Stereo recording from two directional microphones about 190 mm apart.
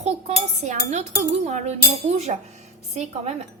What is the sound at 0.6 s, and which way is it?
A woman's voice, 40° right (ahead or behind).